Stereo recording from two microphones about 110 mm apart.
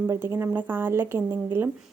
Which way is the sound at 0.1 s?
25° right (ahead or behind).